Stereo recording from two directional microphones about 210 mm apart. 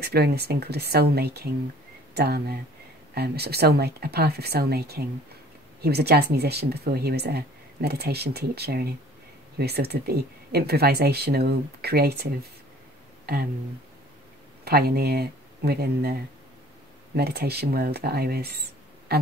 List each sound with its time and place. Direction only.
0.0 s speech: 50° right (ahead or behind)
14.6 s speech: 45° right (ahead or behind)